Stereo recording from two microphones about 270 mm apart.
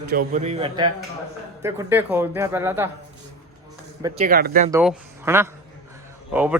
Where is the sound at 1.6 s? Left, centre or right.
Centre.